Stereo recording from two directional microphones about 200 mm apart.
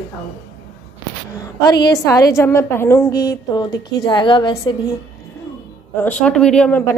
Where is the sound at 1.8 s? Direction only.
15° left (ahead or behind).